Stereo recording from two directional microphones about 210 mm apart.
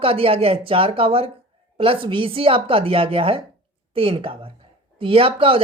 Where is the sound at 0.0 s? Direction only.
25° right (ahead or behind).